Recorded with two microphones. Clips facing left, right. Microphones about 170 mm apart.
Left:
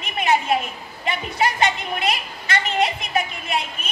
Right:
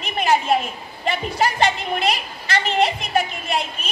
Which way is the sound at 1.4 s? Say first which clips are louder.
Right 1 dB; 30° right (ahead or behind).